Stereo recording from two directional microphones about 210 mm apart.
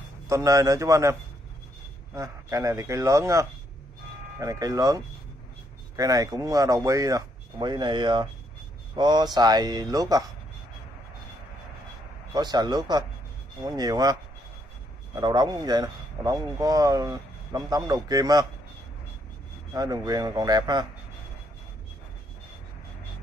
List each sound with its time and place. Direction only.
0.3 s a man's voice: 15° right (ahead or behind)
2.1 s a man's voice: 15° right (ahead or behind)
12.4 s speech: 20° right (ahead or behind)
15.1 s a man's voice: 20° right (ahead or behind)
19.7 s speech: 20° right (ahead or behind)